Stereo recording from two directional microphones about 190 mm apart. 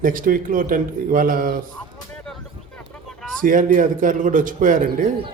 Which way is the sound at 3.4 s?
45° right (ahead or behind).